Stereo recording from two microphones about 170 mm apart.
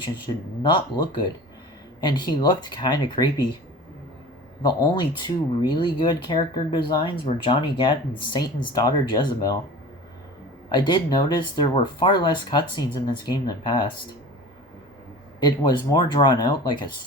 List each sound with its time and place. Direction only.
0.3 s speech: 30° left (ahead or behind)
4.6 s speech: 25° left (ahead or behind)
10.7 s speech: 25° left (ahead or behind)
15.4 s speech: 25° left (ahead or behind)